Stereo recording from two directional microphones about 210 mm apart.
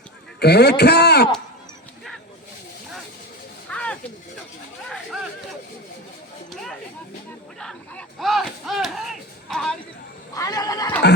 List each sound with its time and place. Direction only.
0.3 s a man's voice: 50° left (ahead or behind)
3.7 s snake: 5° left (ahead or behind)
6.5 s a sound: centre (ahead or behind)
10.3 s cat: 15° left (ahead or behind)